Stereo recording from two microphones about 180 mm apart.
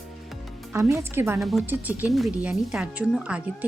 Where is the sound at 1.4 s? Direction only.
Centre (ahead or behind).